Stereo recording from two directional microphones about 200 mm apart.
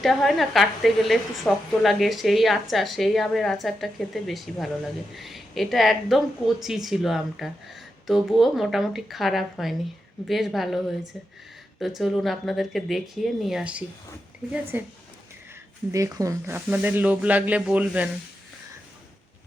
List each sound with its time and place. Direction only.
0.0 s a woman's voice: centre (ahead or behind)
15.9 s speech: 15° right (ahead or behind)